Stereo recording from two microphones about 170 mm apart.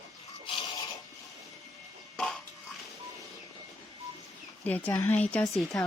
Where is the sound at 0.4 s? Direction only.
25° left (ahead or behind).